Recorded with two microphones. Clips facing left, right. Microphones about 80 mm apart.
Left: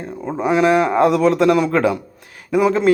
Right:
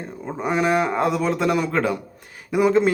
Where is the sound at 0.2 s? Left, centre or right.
Left.